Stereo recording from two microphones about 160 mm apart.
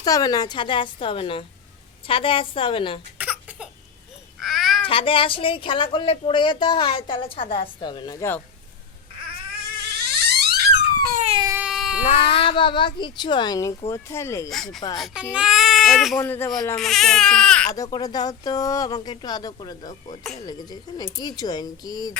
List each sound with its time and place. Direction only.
0.0 s speech: 25° left (ahead or behind)
3.2 s a sound: 10° right (ahead or behind)
4.4 s babbling: centre (ahead or behind)
4.8 s speech: 35° left (ahead or behind); by 8.4 s 20° left (ahead or behind)
9.7 s a sound: 90° right
11.5 s baby cry: 5° right (ahead or behind)
12.1 s speech: 35° left (ahead or behind); by 14.5 s 20° left (ahead or behind)
14.5 s speech: centre (ahead or behind)
16.2 s speech: 15° left (ahead or behind)
16.7 s speech: centre (ahead or behind)
17.9 s speech: 25° left (ahead or behind)